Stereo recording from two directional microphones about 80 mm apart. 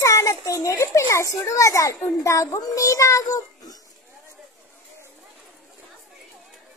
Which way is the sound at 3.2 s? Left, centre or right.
Left.